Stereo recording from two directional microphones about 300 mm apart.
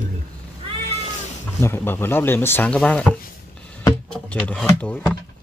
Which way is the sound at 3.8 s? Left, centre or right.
Centre.